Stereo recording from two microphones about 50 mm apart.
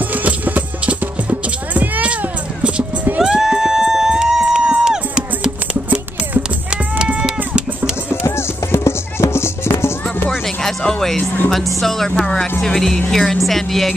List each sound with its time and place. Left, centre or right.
0.1 s music: right
1.7 s a sound: right
3.2 s music: centre
7.2 s music: centre
8.7 s music: left
10.6 s music: centre
11.5 s speech: centre